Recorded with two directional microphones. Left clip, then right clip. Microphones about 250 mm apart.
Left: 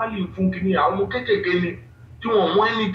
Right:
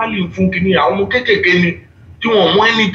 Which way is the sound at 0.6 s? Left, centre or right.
Right.